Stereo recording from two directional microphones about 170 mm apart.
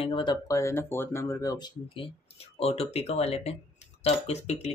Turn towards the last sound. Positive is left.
turn(degrees=40)  # may be behind; listen again after turning